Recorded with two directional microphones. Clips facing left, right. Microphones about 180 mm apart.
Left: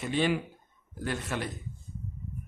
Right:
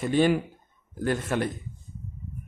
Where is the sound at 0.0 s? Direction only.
45° right (ahead or behind).